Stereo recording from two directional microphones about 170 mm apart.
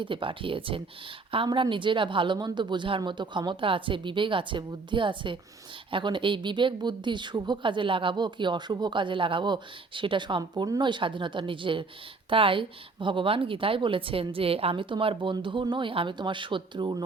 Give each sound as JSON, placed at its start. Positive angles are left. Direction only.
{"t": 0.0, "sound": "a woman's voice", "side_deg": -30}